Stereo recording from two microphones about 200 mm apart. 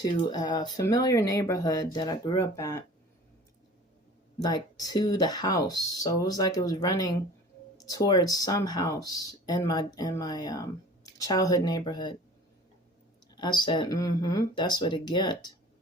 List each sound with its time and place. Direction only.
0.0 s speech: 20° left (ahead or behind)
4.4 s speech: 20° left (ahead or behind)
13.3 s speech: 20° left (ahead or behind)